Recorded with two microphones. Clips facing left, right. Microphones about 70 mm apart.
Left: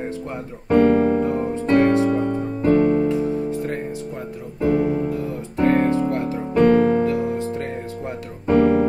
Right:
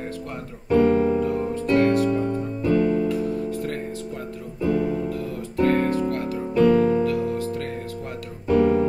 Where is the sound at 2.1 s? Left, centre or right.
Left.